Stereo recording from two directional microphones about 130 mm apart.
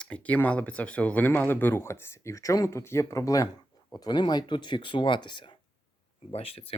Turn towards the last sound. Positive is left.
turn(degrees=45)  # may be behind; listen again after turning